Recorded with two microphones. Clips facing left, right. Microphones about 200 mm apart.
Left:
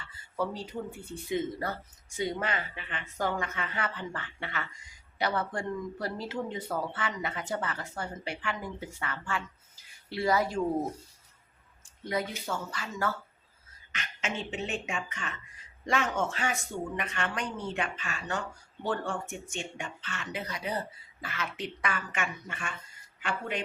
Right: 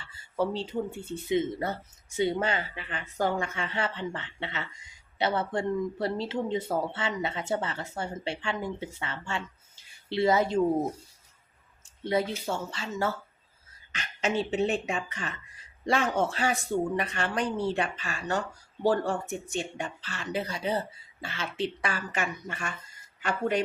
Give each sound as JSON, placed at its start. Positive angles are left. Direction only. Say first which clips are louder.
{"t": 0.3, "sound": "speech", "louder": "right 5 dB", "side_deg": -25}
{"t": 12.0, "sound": "speech", "louder": "right 5 dB", "side_deg": -30}